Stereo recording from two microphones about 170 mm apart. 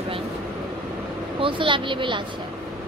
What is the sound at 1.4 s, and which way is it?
Speech, 30° right (ahead or behind).